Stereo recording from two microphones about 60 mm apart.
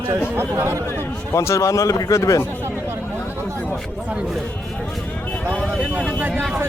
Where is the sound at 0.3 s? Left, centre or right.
Right.